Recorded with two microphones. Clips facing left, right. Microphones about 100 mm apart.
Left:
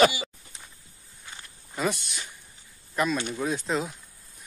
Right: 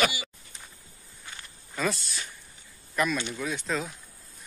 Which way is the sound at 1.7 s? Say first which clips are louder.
Left 1 dB; 20° left (ahead or behind).